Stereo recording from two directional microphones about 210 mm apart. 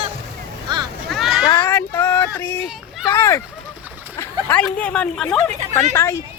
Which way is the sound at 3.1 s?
15° left (ahead or behind).